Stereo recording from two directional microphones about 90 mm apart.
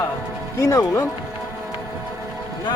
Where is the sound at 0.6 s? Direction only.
35° left (ahead or behind).